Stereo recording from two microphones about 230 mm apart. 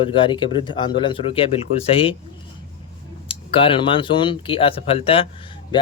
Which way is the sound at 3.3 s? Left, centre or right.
Left.